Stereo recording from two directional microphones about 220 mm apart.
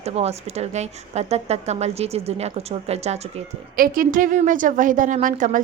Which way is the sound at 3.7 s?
40° right (ahead or behind).